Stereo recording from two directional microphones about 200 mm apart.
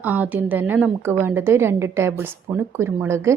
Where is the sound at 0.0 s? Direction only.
10° right (ahead or behind).